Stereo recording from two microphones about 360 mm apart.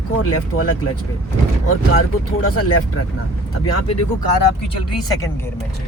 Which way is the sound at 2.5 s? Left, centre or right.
Left.